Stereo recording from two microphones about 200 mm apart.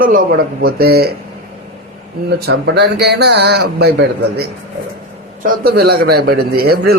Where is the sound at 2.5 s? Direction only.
55° right (ahead or behind).